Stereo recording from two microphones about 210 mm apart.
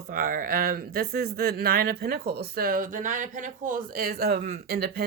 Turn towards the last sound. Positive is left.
turn(degrees=-45)  # may be behind; listen again after turning